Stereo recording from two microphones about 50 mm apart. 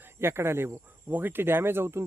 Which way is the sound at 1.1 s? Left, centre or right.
Right.